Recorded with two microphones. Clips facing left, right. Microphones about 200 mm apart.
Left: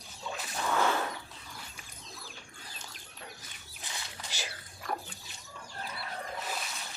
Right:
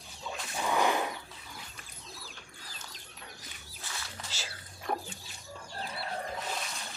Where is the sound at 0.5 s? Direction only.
15° right (ahead or behind).